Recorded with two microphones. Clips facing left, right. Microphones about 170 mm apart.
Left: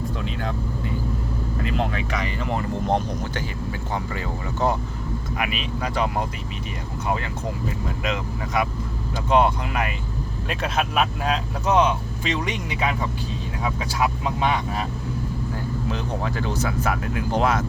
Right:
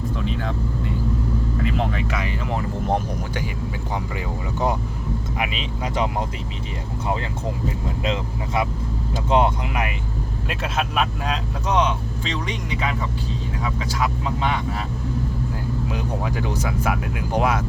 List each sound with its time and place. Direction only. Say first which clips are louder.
1.6 s speech: left 1 dB; centre (ahead or behind); by 6.2 s 20° right (ahead or behind)
7.9 s speech: right 2 dB; 25° right (ahead or behind)
10.5 s speech: left 1 dB; centre (ahead or behind)
14.0 s speech: left 2 dB; 15° left (ahead or behind)
15.9 s speech: left 1 dB; 15° right (ahead or behind)